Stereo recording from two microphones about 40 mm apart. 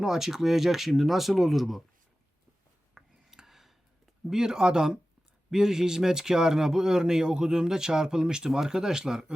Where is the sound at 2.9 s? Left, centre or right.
Centre.